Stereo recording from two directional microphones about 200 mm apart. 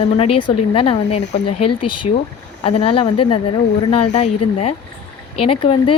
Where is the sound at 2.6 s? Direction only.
25° left (ahead or behind).